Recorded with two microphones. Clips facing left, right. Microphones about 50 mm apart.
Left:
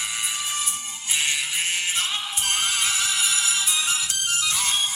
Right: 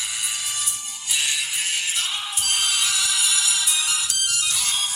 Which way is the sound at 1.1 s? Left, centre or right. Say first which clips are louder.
Even; left.